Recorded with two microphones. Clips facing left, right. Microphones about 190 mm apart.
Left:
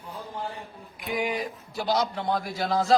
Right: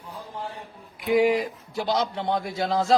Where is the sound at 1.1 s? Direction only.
25° right (ahead or behind).